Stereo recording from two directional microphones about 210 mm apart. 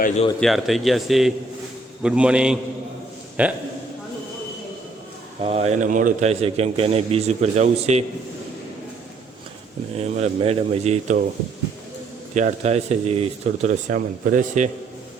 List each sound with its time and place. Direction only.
0.3 s speech: centre (ahead or behind)
5.4 s a man's voice: 30° right (ahead or behind)
10.0 s a man's voice: 30° right (ahead or behind)
12.3 s a man's voice: 35° right (ahead or behind)